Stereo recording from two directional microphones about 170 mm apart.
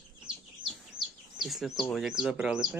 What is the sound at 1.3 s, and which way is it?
Speech, centre (ahead or behind).